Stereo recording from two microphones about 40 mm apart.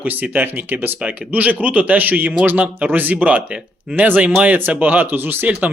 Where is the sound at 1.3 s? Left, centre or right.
Right.